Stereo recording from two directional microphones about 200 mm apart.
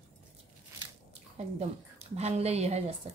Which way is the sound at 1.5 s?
30° right (ahead or behind).